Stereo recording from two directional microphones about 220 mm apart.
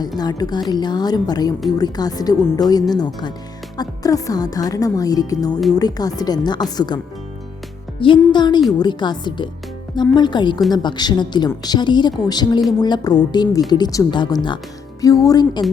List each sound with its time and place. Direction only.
0.2 s a woman's voice: 20° left (ahead or behind)